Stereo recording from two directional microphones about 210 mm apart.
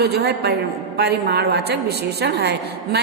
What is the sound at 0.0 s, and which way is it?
A woman's voice, 50° right (ahead or behind).